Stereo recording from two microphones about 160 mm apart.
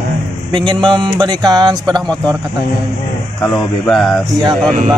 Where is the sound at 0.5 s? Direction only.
30° right (ahead or behind).